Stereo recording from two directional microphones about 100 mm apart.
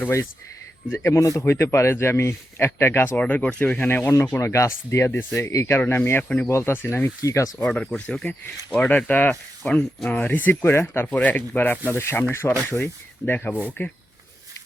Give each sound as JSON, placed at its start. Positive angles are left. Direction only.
{"t": 0.9, "sound": "speech", "side_deg": 30}
{"t": 6.5, "sound": "speech", "side_deg": 25}
{"t": 7.6, "sound": "speech", "side_deg": 5}
{"t": 9.6, "sound": "speech", "side_deg": 5}
{"t": 10.1, "sound": "speech", "side_deg": 15}